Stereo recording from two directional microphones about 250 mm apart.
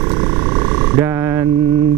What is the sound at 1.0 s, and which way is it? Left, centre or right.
Frog, centre.